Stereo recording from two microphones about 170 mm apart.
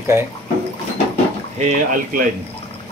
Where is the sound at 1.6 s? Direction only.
55° right (ahead or behind).